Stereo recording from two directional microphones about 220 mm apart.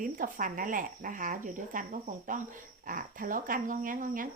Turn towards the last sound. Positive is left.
turn(degrees=-40)  # may be behind; listen again after turning